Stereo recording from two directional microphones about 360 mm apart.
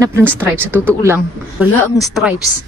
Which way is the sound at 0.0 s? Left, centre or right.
Centre.